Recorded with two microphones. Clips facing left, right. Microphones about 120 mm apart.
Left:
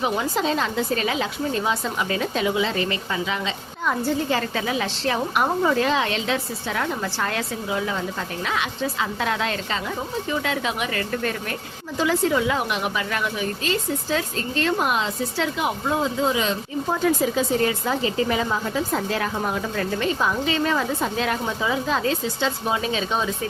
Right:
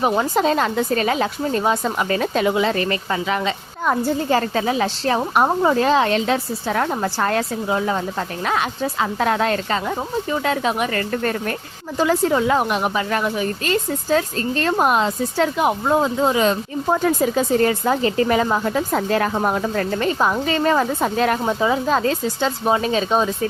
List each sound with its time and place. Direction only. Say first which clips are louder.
0.0 s a woman's voice: right 5 dB; 50° right (ahead or behind)